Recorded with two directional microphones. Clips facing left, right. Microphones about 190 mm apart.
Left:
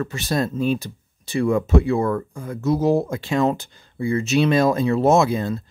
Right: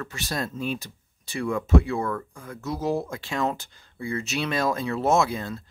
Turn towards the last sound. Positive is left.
turn(degrees=20)  # may be behind; listen again after turning